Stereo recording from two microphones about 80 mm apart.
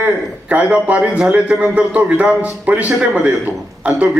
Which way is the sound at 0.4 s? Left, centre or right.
Centre.